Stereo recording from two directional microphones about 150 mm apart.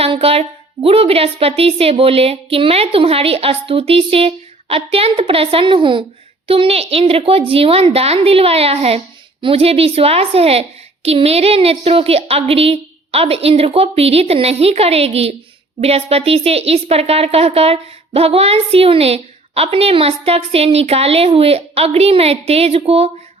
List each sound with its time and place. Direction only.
0.0 s speech: 40° right (ahead or behind)